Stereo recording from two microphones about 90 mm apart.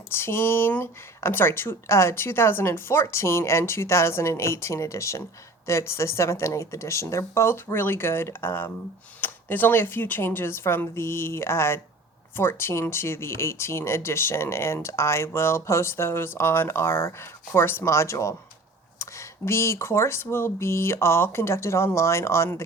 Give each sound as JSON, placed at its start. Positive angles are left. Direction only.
{"t": 0.1, "sound": "speech", "side_deg": 25}